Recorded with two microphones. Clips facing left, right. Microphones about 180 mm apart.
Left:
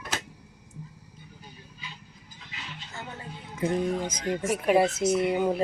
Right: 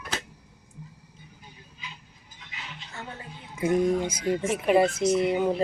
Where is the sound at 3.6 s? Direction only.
10° right (ahead or behind).